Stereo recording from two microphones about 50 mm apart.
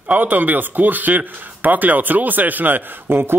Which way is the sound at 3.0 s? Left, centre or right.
Right.